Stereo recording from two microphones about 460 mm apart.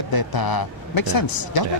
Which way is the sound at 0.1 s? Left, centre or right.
Left.